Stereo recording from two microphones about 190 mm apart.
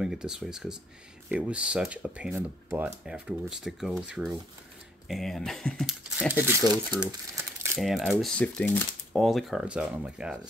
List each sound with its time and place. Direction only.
0.0 s speech: 5° right (ahead or behind)
6.6 s speech: 20° right (ahead or behind)
7.8 s speech: centre (ahead or behind)